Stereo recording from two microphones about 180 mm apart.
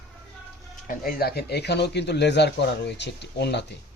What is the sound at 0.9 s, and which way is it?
Speech, 55° left (ahead or behind).